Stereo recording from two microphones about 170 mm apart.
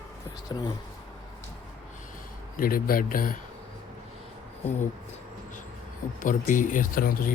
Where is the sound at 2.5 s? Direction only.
60° left (ahead or behind).